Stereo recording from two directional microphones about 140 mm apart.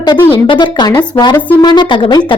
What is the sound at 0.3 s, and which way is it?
A woman's voice, 35° left (ahead or behind).